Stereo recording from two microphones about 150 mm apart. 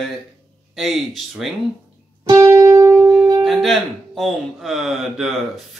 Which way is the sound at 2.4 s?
25° right (ahead or behind).